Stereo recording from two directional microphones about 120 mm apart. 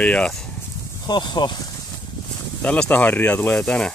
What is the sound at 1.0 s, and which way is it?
Speech, 35° left (ahead or behind).